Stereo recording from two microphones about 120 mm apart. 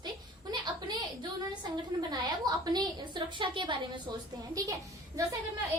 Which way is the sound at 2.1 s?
35° right (ahead or behind).